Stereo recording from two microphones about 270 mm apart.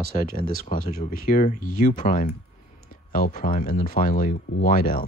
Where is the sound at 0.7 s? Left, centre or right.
Left.